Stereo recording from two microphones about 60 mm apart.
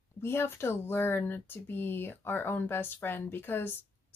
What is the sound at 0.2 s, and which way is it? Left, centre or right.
Speech, left.